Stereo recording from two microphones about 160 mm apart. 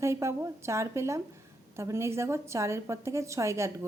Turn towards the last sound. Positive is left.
turn(degrees=-20)  # may be behind; listen again after turning